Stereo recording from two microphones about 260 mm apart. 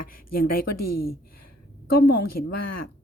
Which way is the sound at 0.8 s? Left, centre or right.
Left.